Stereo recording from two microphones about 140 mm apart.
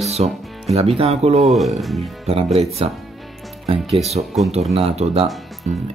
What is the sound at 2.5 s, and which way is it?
Speech, 45° right (ahead or behind).